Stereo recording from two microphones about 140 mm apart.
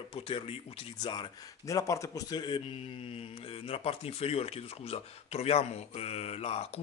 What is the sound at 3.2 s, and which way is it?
Speech, 45° left (ahead or behind).